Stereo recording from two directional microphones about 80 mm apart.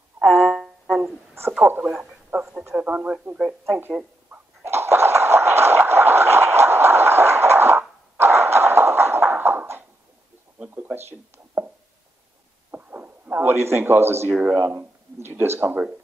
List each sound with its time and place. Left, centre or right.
0.5 s music: centre
1.6 s speech: right
1.9 s speech: centre
4.3 s a sound: right
12.7 s a sound: right
15.6 s speech: centre